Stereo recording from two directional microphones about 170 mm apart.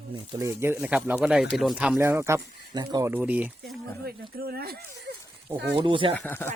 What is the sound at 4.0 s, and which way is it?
Speech, 65° right (ahead or behind).